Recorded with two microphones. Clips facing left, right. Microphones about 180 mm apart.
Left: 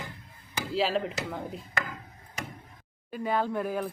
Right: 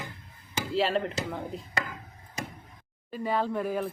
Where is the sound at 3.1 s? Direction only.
Centre (ahead or behind).